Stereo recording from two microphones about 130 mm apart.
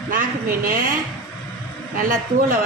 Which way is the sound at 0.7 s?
90° right.